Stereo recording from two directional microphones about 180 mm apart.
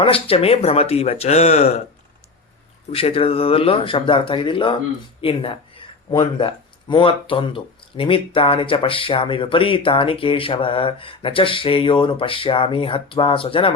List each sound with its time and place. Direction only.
0.0 s speech: 30° left (ahead or behind)
2.9 s speech: 30° left (ahead or behind)